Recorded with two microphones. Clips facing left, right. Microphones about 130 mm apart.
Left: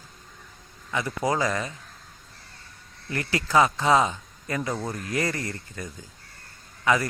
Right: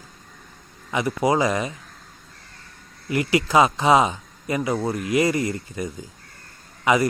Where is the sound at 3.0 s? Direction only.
15° right (ahead or behind).